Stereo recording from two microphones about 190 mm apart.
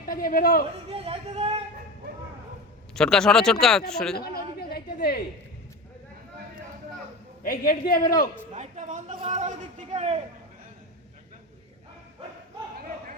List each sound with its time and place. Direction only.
0.0 s a man's voice: 50° left (ahead or behind)
0.9 s a man's voice: 30° right (ahead or behind)
2.9 s speech: 5° left (ahead or behind)
4.7 s a sound: 55° left (ahead or behind)
7.4 s a man's voice: 50° left (ahead or behind)
8.5 s a man's voice: 40° right (ahead or behind)